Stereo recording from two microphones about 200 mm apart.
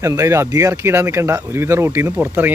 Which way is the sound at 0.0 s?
15° right (ahead or behind).